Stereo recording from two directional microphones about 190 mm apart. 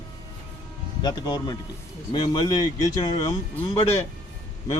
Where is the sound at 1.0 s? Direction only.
20° left (ahead or behind).